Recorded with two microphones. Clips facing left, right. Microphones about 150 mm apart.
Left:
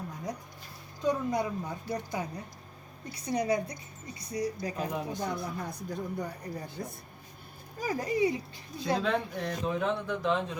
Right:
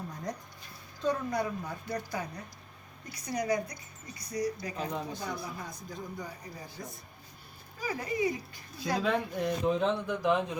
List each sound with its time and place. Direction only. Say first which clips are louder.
1.0 s a woman's voice: left 2 dB; 20° left (ahead or behind)
4.8 s speech: left 2 dB; 10° left (ahead or behind)
5.4 s speech: left 4 dB; 60° left (ahead or behind)
7.8 s speech: left 3 dB; 40° left (ahead or behind)
9.0 s a man's voice: right 4 dB; 5° right (ahead or behind)